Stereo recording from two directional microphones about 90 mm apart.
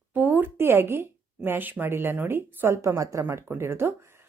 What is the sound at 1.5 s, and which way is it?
A woman's voice, 20° right (ahead or behind).